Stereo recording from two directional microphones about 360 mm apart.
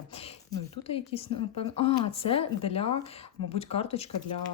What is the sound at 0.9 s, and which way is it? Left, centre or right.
Speech, centre.